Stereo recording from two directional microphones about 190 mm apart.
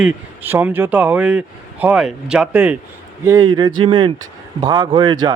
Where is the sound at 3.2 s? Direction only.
20° right (ahead or behind).